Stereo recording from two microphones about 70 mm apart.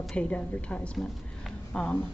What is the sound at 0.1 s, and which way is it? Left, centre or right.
A woman's voice, centre.